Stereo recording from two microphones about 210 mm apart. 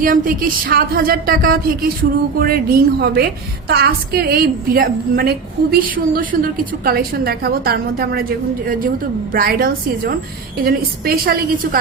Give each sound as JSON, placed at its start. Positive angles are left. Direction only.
{"t": 0.0, "sound": "a woman's voice", "side_deg": -40}
{"t": 6.3, "sound": "a woman's voice", "side_deg": -45}